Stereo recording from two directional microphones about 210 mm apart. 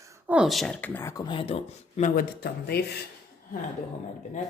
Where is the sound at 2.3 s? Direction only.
50° left (ahead or behind).